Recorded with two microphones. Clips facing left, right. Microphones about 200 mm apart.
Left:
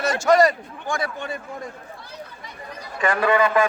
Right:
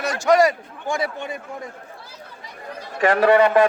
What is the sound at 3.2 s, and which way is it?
Speech, 35° right (ahead or behind).